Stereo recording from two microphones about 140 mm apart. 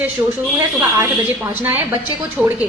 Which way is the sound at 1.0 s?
20° right (ahead or behind).